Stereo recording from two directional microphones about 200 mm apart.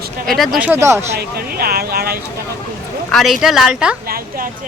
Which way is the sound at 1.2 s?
50° right (ahead or behind).